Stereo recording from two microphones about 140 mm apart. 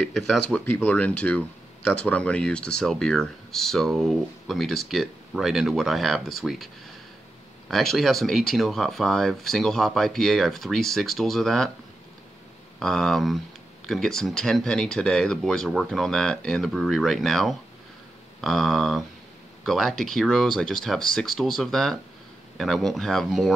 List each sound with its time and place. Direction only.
0.5 s speech: centre (ahead or behind)
12.7 s speech: 5° left (ahead or behind)